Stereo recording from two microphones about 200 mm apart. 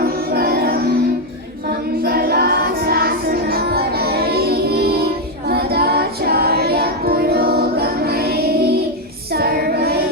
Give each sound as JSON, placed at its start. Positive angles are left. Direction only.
{"t": 0.0, "sound": "music", "side_deg": -50}
{"t": 2.0, "sound": "music", "side_deg": -50}
{"t": 5.5, "sound": "child singing", "side_deg": -50}